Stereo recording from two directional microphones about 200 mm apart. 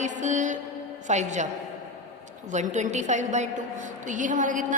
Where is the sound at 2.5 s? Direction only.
35° right (ahead or behind).